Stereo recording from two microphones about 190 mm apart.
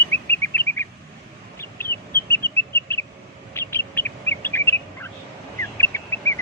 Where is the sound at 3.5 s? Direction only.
10° left (ahead or behind).